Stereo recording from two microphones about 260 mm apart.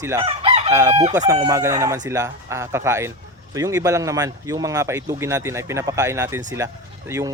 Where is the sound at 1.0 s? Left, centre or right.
Right.